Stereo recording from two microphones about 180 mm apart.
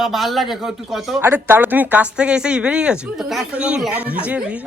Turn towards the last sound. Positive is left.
turn(degrees=-5)  # may be behind; listen again after turning